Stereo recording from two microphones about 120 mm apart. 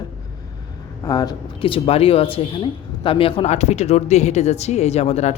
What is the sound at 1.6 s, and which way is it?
A man's voice, 50° left (ahead or behind).